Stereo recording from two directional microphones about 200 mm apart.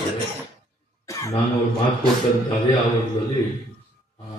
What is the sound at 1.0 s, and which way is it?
Cough, 15° left (ahead or behind).